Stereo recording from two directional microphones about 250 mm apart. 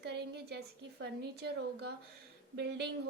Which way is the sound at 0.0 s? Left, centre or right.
Right.